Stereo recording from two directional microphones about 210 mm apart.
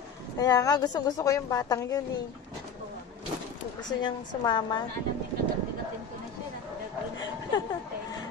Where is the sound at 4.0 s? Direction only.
20° left (ahead or behind).